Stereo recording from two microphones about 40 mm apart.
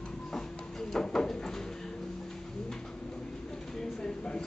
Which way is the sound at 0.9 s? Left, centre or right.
Centre.